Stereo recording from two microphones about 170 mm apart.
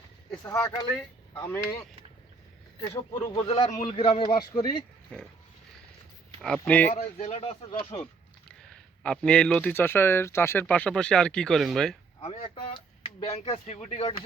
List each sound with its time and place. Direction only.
0.3 s speech: 15° left (ahead or behind)
3.3 s speech: 30° left (ahead or behind)
5.1 s speech: 5° left (ahead or behind)
6.4 s speech: 5° left (ahead or behind)
6.9 s speech: 40° left (ahead or behind)
9.0 s speech: 5° left (ahead or behind)
12.2 s speech: 35° left (ahead or behind)